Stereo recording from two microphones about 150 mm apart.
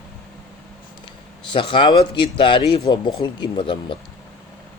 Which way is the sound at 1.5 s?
35° left (ahead or behind).